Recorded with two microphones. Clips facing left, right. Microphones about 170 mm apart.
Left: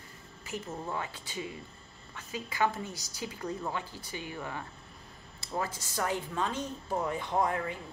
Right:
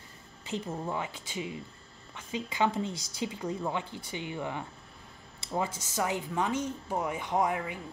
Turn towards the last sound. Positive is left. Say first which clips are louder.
# right 1 dB
turn(degrees=-15)  # may be behind; listen again after turning